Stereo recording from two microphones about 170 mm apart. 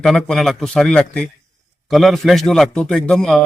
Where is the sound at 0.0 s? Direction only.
5° left (ahead or behind).